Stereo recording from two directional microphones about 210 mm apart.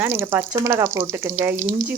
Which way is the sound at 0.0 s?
10° right (ahead or behind).